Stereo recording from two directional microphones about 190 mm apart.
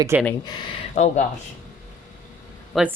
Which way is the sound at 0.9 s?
35° left (ahead or behind).